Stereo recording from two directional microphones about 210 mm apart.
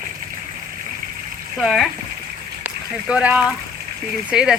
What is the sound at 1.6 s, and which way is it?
Speech, centre (ahead or behind).